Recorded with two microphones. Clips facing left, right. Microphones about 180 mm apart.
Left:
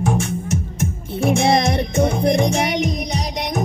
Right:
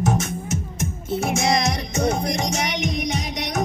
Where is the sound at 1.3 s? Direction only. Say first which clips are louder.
Left 6 dB; 55° left (ahead or behind).